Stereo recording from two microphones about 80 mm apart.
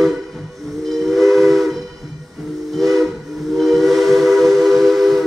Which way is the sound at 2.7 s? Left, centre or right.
Centre.